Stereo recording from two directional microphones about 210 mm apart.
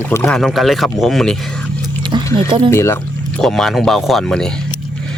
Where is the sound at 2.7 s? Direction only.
10° left (ahead or behind).